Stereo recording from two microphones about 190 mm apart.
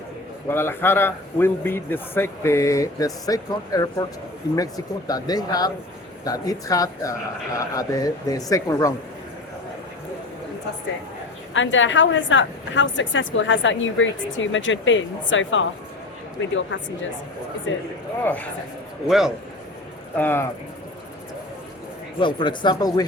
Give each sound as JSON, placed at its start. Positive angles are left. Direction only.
{"t": 0.4, "sound": "a man's voice", "side_deg": 10}
{"t": 11.5, "sound": "a woman's voice", "side_deg": 85}
{"t": 18.2, "sound": "a man's voice", "side_deg": 10}
{"t": 19.0, "sound": "speech", "side_deg": 0}
{"t": 20.1, "sound": "a man's voice", "side_deg": 10}
{"t": 22.2, "sound": "speech", "side_deg": 25}